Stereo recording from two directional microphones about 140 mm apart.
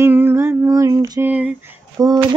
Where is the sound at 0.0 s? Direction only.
15° right (ahead or behind).